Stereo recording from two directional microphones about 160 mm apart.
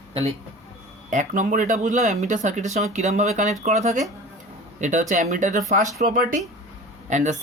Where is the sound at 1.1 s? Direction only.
55° right (ahead or behind).